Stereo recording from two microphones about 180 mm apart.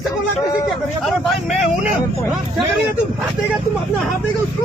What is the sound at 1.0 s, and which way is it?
Speech, centre (ahead or behind).